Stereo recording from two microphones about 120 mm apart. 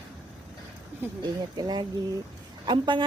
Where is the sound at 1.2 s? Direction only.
35° right (ahead or behind).